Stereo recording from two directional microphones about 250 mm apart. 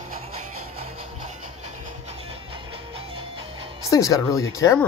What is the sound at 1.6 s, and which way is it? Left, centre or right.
Music, right.